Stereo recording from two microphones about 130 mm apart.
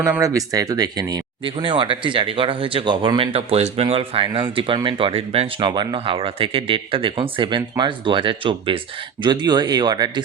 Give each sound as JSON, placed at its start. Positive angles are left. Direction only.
{"t": 0.2, "sound": "speech", "side_deg": -25}
{"t": 5.5, "sound": "speech", "side_deg": -35}